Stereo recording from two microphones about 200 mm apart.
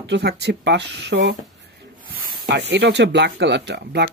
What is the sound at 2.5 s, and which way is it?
Speech, 60° right (ahead or behind).